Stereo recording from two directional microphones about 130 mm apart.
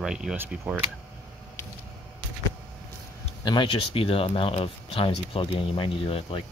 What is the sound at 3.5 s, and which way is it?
Speech, 40° left (ahead or behind).